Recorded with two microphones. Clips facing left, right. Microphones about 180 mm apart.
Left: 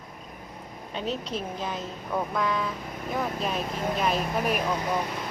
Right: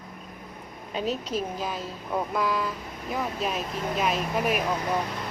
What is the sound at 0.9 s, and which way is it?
Speech, 5° right (ahead or behind).